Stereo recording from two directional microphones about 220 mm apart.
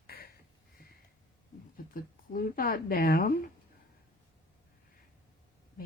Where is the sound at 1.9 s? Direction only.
40° left (ahead or behind).